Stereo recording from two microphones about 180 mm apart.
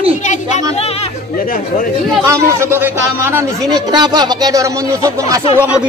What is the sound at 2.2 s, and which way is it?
A man's voice, 15° right (ahead or behind).